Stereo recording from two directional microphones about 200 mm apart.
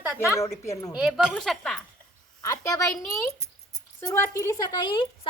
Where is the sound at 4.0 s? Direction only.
15° left (ahead or behind).